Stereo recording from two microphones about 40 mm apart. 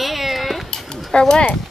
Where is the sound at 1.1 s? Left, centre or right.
Centre.